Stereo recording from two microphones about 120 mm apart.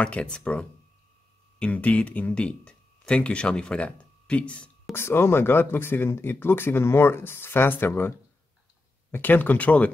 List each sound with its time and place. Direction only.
0.0 s speech: 10° left (ahead or behind)
4.9 s speech: 20° left (ahead or behind)
9.1 s speech: 15° left (ahead or behind)